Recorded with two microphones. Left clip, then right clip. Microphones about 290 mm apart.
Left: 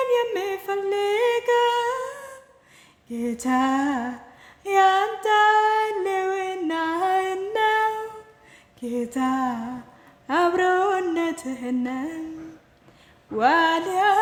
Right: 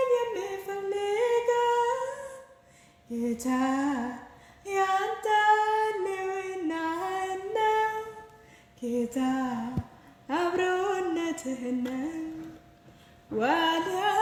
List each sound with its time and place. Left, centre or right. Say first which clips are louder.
0.1 s humming: left 5 dB; centre
3.1 s lullaby: left 5 dB; centre
4.6 s child singing: left 8 dB; centre
8.8 s music: left 4 dB; centre
13.4 s music: left 7 dB; centre